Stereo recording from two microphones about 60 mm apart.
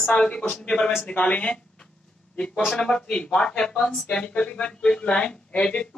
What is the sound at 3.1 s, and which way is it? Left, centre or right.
Speech, centre.